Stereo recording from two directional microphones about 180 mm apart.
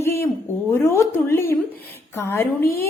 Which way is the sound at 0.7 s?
15° left (ahead or behind).